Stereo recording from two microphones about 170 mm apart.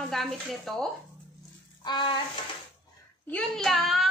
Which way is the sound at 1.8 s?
25° left (ahead or behind).